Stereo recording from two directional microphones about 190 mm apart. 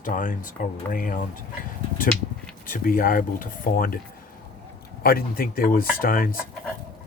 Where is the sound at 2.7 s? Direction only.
50° left (ahead or behind).